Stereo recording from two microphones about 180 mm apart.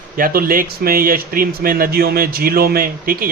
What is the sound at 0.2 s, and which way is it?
Speech, 55° right (ahead or behind).